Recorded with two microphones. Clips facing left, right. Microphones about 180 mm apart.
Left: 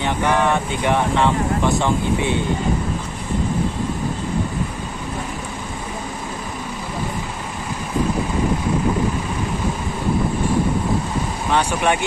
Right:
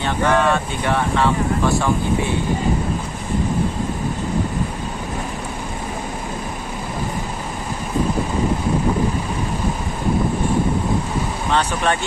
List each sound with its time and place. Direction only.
0.0 s speech: 15° left (ahead or behind)
11.5 s speech: 15° left (ahead or behind)